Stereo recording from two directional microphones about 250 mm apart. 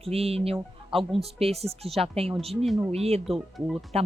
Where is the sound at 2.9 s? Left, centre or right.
Right.